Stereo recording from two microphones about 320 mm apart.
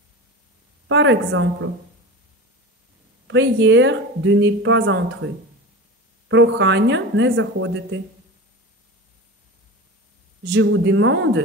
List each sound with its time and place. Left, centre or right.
0.8 s a woman's voice: right
3.3 s a woman's voice: right
6.2 s a woman's voice: right
10.4 s a woman's voice: right